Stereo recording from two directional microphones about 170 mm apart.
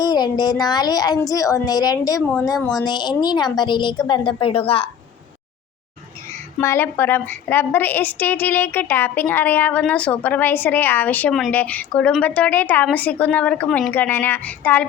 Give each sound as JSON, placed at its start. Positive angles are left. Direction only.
{"t": 0.0, "sound": "a sound", "side_deg": 25}
{"t": 0.6, "sound": "a woman's voice", "side_deg": 25}
{"t": 6.6, "sound": "a woman's voice", "side_deg": 15}